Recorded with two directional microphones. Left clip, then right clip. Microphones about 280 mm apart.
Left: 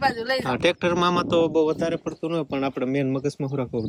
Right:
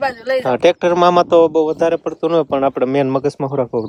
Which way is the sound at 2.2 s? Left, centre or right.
Right.